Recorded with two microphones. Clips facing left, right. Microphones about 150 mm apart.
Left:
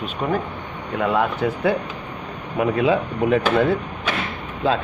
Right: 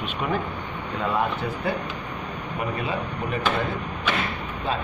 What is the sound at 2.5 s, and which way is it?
Speech, 90° left.